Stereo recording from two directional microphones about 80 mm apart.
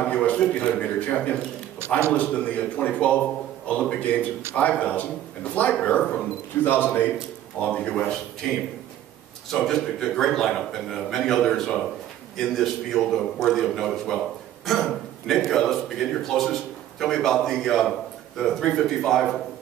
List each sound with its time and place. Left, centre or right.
0.0 s a man's voice: centre
1.8 s a man's voice: right
2.1 s a man's voice: centre
7.6 s a man's voice: centre